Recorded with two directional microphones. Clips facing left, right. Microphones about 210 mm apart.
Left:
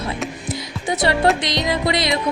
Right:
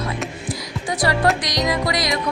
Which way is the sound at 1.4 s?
25° left (ahead or behind).